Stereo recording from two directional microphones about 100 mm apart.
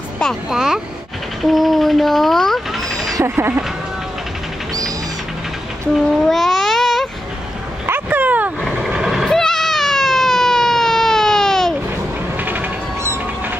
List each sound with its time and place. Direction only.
0.2 s speech: centre (ahead or behind)
3.3 s speech: 20° right (ahead or behind)
6.2 s baby cry: centre (ahead or behind)
7.8 s vehicle: 20° right (ahead or behind)
8.8 s vehicle: 5° right (ahead or behind)
12.4 s cat: 15° right (ahead or behind)